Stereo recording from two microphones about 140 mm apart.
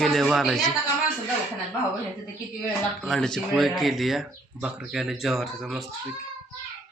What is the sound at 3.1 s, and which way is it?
Speech, 5° left (ahead or behind).